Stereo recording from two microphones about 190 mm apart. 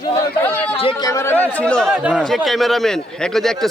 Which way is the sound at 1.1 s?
15° left (ahead or behind).